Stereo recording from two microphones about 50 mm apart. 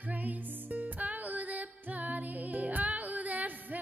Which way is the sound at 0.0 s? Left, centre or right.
Right.